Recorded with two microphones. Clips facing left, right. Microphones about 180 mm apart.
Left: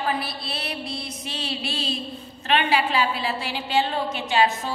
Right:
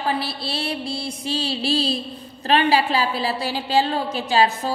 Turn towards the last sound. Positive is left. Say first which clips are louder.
# right 2 dB
turn(degrees=-35)  # may be behind; listen again after turning